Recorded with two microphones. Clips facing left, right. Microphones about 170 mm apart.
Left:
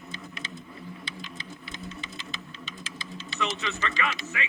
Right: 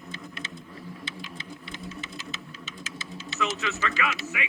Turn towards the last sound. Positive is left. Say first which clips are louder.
# right 1 dB
turn(degrees=-5)  # may be behind; listen again after turning